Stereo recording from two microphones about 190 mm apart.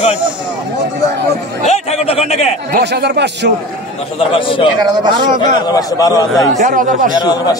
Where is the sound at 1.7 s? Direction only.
35° left (ahead or behind).